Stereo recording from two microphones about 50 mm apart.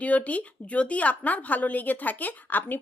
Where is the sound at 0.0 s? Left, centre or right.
Left.